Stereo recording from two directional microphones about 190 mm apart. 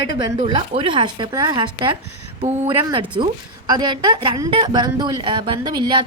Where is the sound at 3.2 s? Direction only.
25° right (ahead or behind).